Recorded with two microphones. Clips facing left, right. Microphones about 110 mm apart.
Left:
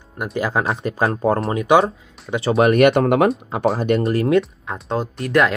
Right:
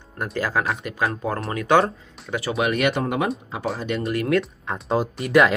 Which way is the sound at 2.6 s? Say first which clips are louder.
Left 9 dB; 50° left (ahead or behind).